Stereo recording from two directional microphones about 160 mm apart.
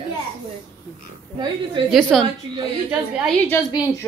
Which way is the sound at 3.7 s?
25° left (ahead or behind).